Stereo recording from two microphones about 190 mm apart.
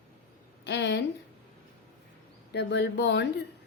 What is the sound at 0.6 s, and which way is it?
Speech, 65° left (ahead or behind).